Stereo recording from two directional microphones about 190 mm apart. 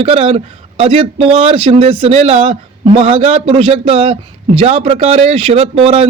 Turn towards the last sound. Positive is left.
turn(degrees=-30)  # may be behind; listen again after turning